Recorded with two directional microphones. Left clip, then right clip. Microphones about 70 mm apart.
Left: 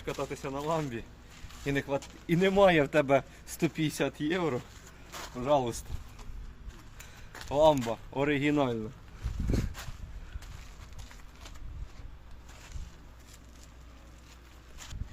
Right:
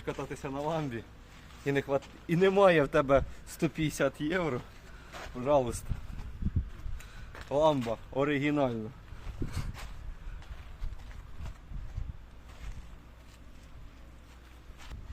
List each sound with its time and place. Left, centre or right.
0.0 s speech: centre
1.6 s speech: right
2.9 s speech: right
3.8 s speech: right
5.4 s speech: centre
7.4 s speech: centre